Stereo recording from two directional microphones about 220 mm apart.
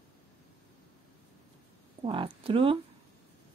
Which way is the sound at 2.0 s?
25° right (ahead or behind).